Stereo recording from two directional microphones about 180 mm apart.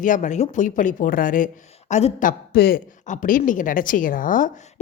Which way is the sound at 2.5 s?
55° left (ahead or behind).